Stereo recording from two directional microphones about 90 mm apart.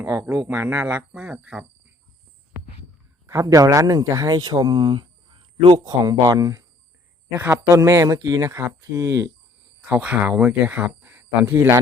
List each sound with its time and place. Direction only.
0.0 s speech: 25° right (ahead or behind)
3.2 s speech: 40° right (ahead or behind); by 5.8 s 75° right (ahead or behind)
5.8 s speech: 45° right (ahead or behind)
7.3 s speech: 25° right (ahead or behind)
9.9 s speech: 15° right (ahead or behind)